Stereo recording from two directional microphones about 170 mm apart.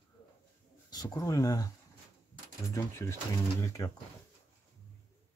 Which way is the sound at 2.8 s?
15° left (ahead or behind).